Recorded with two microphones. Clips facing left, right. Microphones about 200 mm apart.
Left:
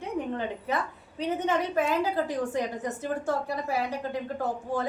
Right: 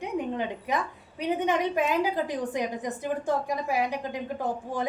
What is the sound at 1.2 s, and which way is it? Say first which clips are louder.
A woman's voice: right 1 dB; 15° right (ahead or behind).